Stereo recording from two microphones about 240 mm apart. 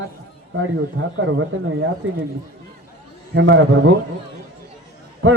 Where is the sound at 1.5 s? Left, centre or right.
Right.